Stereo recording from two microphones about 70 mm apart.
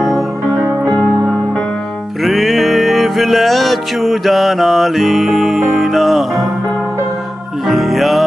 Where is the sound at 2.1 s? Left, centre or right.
Centre.